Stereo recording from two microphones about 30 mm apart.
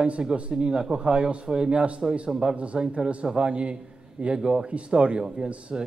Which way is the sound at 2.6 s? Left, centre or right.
Right.